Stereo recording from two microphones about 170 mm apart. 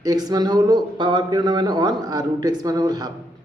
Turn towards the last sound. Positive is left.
turn(degrees=-20)  # may be behind; listen again after turning